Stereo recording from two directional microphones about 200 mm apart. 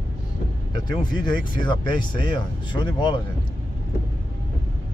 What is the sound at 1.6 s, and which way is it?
Speech, 20° left (ahead or behind).